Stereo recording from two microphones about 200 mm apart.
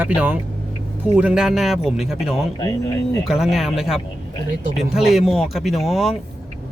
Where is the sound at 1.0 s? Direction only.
5° right (ahead or behind).